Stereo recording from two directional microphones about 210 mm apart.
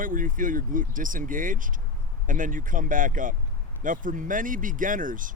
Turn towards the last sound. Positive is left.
turn(degrees=-40)  # may be behind; listen again after turning